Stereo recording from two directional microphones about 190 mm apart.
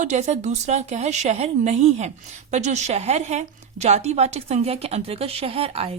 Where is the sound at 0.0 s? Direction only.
40° right (ahead or behind).